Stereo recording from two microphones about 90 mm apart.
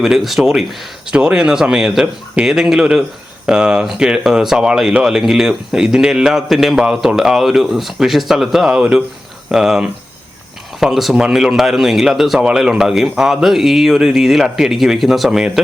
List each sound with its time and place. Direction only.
0.0 s speech: 5° right (ahead or behind)